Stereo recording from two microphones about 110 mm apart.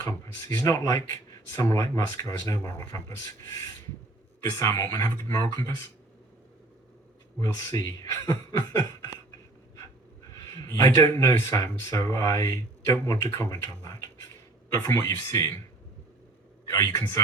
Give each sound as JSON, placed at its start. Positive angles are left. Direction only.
{"t": 0.0, "sound": "speech", "side_deg": 30}
{"t": 4.5, "sound": "speech", "side_deg": 30}
{"t": 7.3, "sound": "speech", "side_deg": 30}
{"t": 10.3, "sound": "speech", "side_deg": 30}
{"t": 16.6, "sound": "speech", "side_deg": 30}